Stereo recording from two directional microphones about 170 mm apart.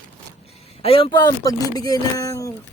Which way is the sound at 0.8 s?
35° left (ahead or behind).